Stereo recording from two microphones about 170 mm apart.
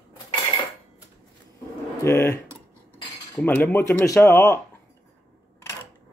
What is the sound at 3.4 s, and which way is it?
Speech, 10° left (ahead or behind).